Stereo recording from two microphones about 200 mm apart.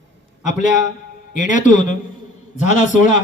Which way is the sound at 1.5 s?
40° left (ahead or behind).